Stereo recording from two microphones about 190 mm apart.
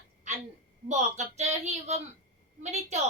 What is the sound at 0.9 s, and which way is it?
Speech, 35° right (ahead or behind).